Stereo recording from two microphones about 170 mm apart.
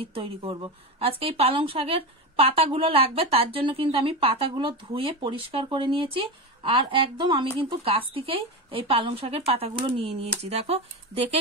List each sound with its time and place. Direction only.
0.0 s a woman's voice: 35° right (ahead or behind)